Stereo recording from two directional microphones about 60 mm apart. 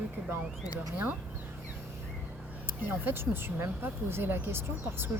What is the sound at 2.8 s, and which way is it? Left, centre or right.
Speech, right.